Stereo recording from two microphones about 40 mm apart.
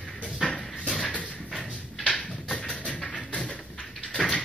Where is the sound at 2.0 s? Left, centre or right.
Centre.